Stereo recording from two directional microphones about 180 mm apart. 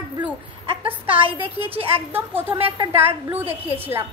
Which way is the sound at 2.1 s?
10° right (ahead or behind).